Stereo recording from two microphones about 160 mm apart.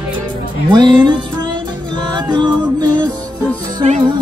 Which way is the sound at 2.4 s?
25° right (ahead or behind).